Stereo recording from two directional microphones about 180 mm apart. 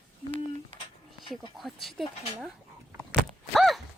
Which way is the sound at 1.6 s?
Centre (ahead or behind).